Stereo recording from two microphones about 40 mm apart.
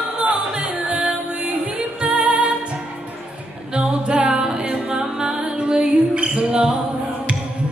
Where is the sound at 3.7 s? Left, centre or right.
Right.